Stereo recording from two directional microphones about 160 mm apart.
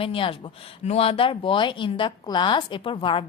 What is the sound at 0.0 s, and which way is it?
Speech, 35° left (ahead or behind).